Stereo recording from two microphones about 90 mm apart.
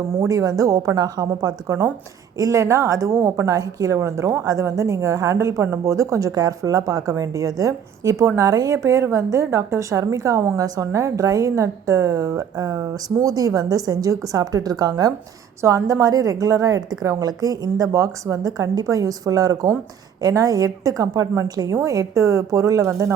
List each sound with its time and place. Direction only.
0.3 s a woman's voice: 40° right (ahead or behind)
2.4 s a woman's voice: 35° right (ahead or behind)
3.4 s a woman's voice: 40° right (ahead or behind)